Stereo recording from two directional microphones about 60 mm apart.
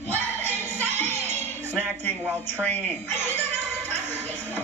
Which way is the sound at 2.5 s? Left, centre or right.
Left.